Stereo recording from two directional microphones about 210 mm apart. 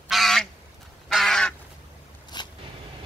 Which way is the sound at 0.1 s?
Centre (ahead or behind).